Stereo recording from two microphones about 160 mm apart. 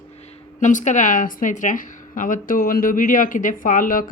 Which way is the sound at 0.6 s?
50° left (ahead or behind).